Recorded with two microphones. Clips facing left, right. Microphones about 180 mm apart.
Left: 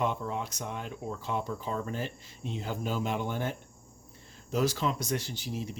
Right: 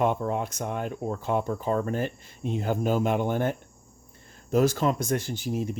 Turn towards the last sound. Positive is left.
turn(degrees=-50)  # may be behind; listen again after turning